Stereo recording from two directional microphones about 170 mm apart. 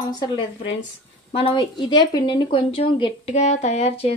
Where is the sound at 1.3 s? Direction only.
30° left (ahead or behind).